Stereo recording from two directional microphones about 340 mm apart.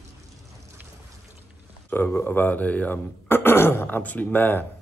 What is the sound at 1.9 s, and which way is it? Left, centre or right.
Speech, centre.